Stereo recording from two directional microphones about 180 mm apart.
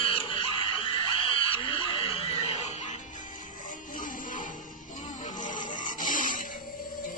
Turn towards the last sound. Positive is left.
turn(degrees=45)  # may be behind; listen again after turning